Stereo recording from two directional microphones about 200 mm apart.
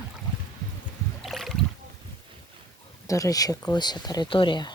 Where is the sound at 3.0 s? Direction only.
15° left (ahead or behind).